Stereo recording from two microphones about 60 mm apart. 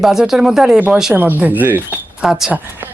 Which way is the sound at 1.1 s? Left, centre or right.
Right.